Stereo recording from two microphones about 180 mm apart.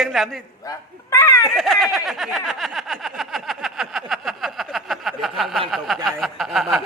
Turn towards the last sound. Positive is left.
turn(degrees=0)  # may be behind; listen again after turning